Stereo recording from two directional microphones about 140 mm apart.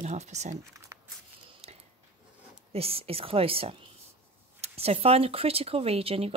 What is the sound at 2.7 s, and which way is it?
Speech, 45° right (ahead or behind).